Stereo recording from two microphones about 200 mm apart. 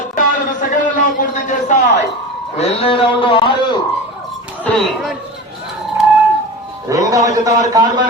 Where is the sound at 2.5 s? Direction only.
30° left (ahead or behind).